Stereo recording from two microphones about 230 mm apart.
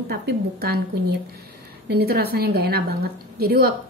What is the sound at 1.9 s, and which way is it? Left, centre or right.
A woman's voice, right.